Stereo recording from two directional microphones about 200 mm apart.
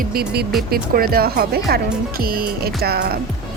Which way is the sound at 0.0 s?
50° right (ahead or behind).